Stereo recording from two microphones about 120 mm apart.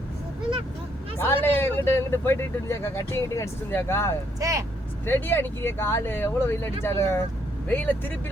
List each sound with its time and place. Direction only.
1.2 s a man's voice: 20° left (ahead or behind)
4.4 s speech: 25° right (ahead or behind)
5.0 s a man's voice: 20° left (ahead or behind)